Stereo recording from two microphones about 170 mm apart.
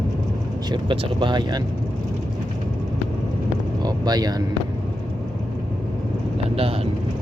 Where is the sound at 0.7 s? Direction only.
30° right (ahead or behind).